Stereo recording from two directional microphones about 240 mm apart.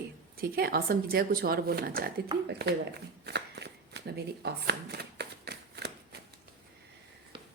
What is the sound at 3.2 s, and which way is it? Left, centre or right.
Shuffling cards, right.